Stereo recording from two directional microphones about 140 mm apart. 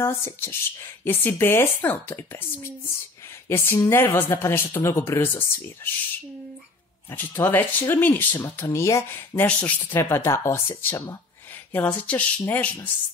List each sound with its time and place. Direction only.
0.0 s speech: 20° left (ahead or behind)
7.1 s speech: 15° left (ahead or behind)